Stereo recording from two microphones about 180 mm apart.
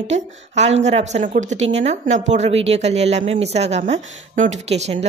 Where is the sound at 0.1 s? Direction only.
40° right (ahead or behind).